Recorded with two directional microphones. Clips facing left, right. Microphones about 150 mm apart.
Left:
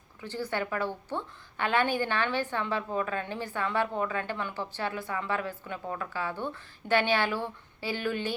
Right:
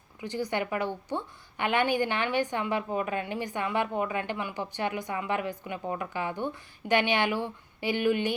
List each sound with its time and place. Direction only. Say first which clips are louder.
0.2 s a woman's voice: right 2 dB; 15° right (ahead or behind)